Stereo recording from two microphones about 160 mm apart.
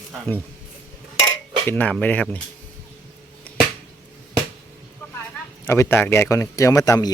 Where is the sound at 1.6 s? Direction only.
10° left (ahead or behind).